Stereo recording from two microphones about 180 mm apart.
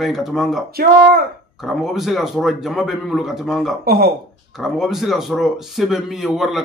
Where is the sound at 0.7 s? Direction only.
60° right (ahead or behind).